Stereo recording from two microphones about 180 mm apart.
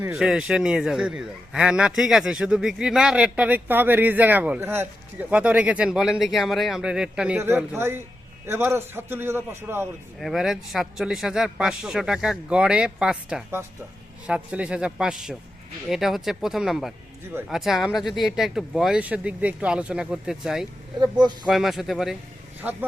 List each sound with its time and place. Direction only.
0.1 s a man's voice: 5° right (ahead or behind)
10.2 s a man's voice: centre (ahead or behind)
21.0 s speech: 25° right (ahead or behind)
21.4 s a man's voice: centre (ahead or behind)